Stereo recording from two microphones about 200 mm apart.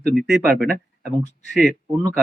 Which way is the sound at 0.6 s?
50° right (ahead or behind).